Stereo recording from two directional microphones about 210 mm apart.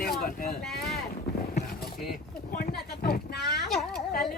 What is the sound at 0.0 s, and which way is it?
Speech, 45° left (ahead or behind).